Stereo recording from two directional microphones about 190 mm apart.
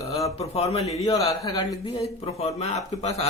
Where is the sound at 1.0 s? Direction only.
20° left (ahead or behind).